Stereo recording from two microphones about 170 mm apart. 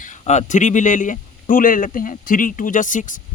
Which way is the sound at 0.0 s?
45° left (ahead or behind).